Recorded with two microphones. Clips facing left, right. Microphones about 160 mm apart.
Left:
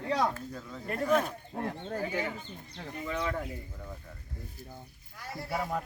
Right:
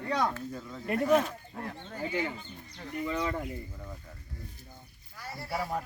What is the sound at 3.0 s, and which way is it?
Speech, centre (ahead or behind).